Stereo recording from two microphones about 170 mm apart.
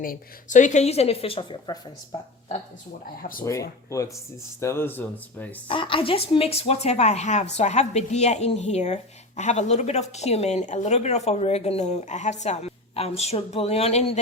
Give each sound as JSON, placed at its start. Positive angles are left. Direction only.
{"t": 0.0, "sound": "speech", "side_deg": 50}
{"t": 4.6, "sound": "speech", "side_deg": 15}
{"t": 5.6, "sound": "speech", "side_deg": 30}